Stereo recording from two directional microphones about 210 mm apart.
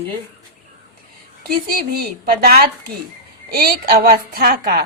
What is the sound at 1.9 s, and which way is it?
A woman's voice, 45° right (ahead or behind).